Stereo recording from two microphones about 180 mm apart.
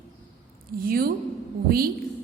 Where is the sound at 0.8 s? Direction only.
55° right (ahead or behind).